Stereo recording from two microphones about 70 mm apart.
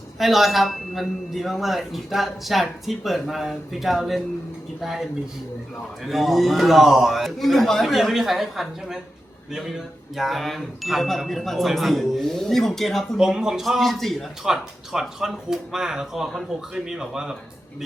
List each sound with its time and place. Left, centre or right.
0.2 s speech: centre
6.1 s speech: centre
13.1 s speech: centre